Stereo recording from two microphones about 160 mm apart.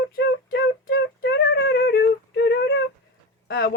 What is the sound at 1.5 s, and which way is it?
Speech, 90° left.